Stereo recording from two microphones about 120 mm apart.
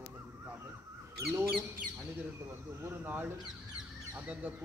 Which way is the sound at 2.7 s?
15° right (ahead or behind).